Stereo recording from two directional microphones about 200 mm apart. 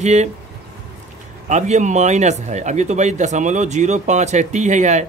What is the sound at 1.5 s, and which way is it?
Speech, 35° right (ahead or behind).